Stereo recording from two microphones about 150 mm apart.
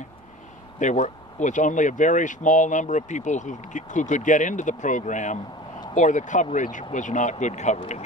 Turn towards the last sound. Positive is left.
turn(degrees=50)  # may be behind; listen again after turning